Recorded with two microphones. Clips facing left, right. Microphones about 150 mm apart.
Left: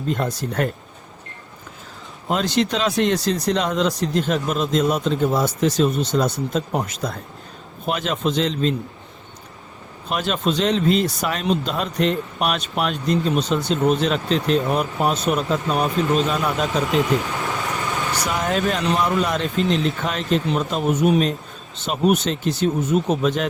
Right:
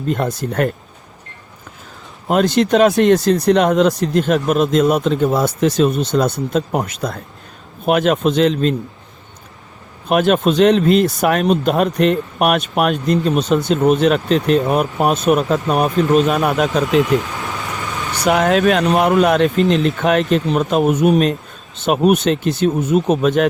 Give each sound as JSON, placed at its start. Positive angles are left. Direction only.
{"t": 0.1, "sound": "speech", "side_deg": -55}
{"t": 2.2, "sound": "speech", "side_deg": -55}
{"t": 10.1, "sound": "speech", "side_deg": -60}
{"t": 16.5, "sound": "speech", "side_deg": -90}
{"t": 18.3, "sound": "speech", "side_deg": -75}